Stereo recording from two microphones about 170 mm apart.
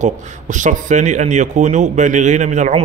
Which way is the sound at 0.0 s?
45° right (ahead or behind).